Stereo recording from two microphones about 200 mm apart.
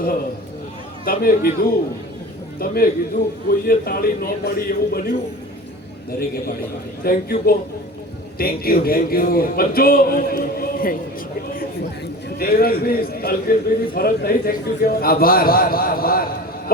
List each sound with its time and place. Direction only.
1.0 s a man's voice: 45° left (ahead or behind)
12.4 s a man's voice: 50° left (ahead or behind)